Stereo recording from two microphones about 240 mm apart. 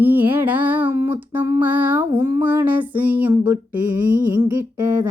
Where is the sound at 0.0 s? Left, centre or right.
Centre.